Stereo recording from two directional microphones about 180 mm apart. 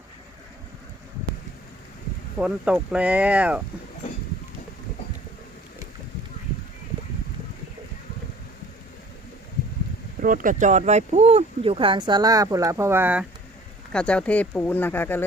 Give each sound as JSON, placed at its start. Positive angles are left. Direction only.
{"t": 2.4, "sound": "speech", "side_deg": -5}
{"t": 10.2, "sound": "speech", "side_deg": -50}
{"t": 13.9, "sound": "speech", "side_deg": 5}